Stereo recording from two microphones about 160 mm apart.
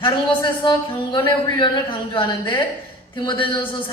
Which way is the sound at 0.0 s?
30° left (ahead or behind).